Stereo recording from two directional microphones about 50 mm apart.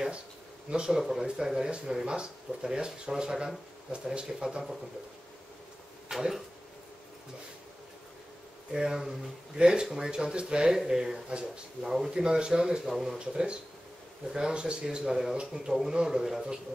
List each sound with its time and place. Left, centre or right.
0.7 s speech: centre
6.0 s a sound: centre
8.7 s speech: centre